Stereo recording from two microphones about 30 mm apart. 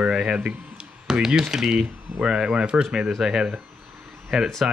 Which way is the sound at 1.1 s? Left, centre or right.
Right.